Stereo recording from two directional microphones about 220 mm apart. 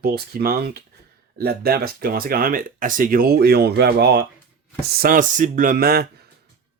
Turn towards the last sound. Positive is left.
turn(degrees=-45)  # may be behind; listen again after turning